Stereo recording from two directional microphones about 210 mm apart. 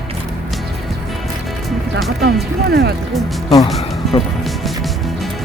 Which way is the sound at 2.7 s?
50° right (ahead or behind).